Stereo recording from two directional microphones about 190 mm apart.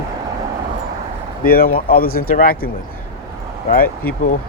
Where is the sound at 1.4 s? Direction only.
50° left (ahead or behind).